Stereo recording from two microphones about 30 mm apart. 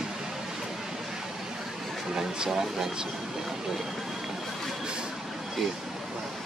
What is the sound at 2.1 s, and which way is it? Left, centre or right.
Speech, right.